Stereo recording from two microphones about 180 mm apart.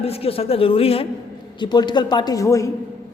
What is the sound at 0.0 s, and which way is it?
A man's voice, 35° left (ahead or behind).